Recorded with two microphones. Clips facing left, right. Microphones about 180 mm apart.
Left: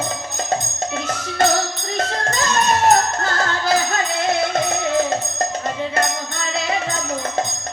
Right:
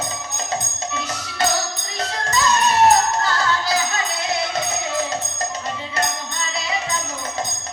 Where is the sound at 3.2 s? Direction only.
50° left (ahead or behind).